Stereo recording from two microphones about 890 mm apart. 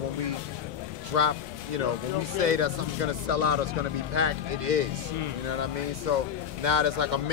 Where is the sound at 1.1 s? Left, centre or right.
Right.